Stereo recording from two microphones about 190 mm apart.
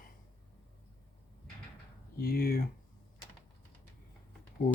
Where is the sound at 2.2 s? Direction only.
55° left (ahead or behind).